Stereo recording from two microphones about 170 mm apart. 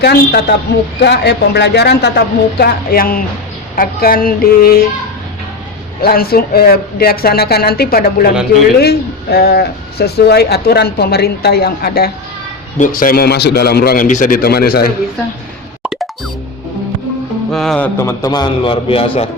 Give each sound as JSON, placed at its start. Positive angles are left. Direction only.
{"t": 0.0, "sound": "speech", "side_deg": 75}
{"t": 6.0, "sound": "speech", "side_deg": 65}
{"t": 12.8, "sound": "speech", "side_deg": 55}
{"t": 15.8, "sound": "music", "side_deg": 0}
{"t": 17.5, "sound": "speech", "side_deg": 0}
{"t": 18.0, "sound": "a man's voice", "side_deg": 20}